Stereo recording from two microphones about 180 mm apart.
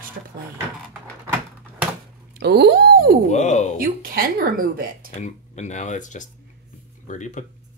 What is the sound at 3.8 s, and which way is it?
Speech, 55° right (ahead or behind).